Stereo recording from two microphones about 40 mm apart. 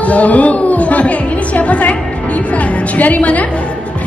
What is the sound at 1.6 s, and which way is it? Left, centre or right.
Speech, left.